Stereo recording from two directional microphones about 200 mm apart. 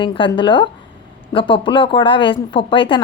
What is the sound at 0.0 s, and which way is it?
A woman's voice, 25° left (ahead or behind).